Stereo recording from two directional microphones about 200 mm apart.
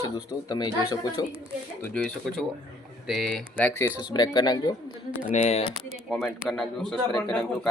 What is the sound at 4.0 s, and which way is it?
Speech, 20° left (ahead or behind).